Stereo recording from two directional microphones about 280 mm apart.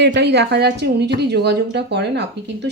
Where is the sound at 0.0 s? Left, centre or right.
Right.